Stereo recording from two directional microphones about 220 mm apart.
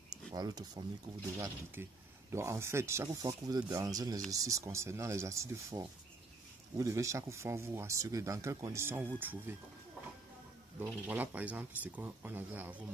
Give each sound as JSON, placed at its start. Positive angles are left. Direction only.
{"t": 0.1, "sound": "speech", "side_deg": -20}
{"t": 10.8, "sound": "speech", "side_deg": -10}